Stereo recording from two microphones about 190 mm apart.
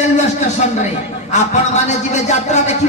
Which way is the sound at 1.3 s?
35° left (ahead or behind).